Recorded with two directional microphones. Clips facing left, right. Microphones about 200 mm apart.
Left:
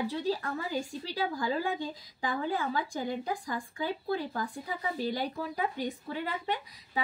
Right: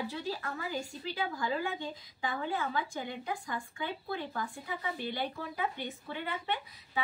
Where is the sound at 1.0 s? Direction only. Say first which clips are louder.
Left 1 dB; 35° left (ahead or behind).